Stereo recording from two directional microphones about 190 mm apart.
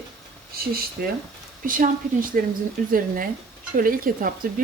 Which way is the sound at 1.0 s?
50° right (ahead or behind).